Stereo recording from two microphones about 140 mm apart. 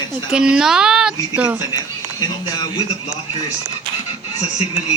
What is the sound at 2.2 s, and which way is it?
Speech, 30° left (ahead or behind).